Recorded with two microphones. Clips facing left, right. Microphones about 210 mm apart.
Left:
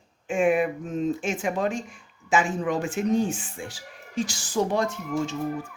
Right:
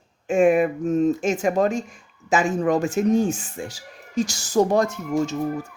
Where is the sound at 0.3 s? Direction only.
40° right (ahead or behind).